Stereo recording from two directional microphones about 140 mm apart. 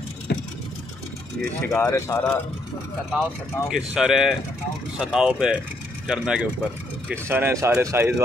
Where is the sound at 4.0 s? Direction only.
Centre (ahead or behind).